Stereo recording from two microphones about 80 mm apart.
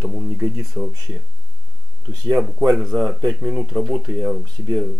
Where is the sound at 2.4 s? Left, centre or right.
Centre.